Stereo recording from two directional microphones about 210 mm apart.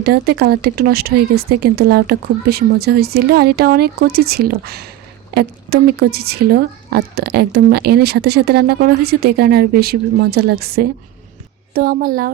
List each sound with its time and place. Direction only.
0.0 s a woman's voice: 50° right (ahead or behind)